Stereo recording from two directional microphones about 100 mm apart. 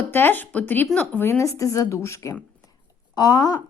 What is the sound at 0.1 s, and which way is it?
A woman's voice, 20° left (ahead or behind).